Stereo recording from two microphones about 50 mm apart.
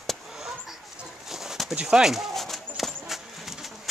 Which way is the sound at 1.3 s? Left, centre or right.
Centre.